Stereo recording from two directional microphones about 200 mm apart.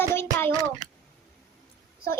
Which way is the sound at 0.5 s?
20° right (ahead or behind).